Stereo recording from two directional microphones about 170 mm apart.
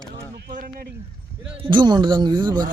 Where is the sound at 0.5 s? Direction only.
60° right (ahead or behind).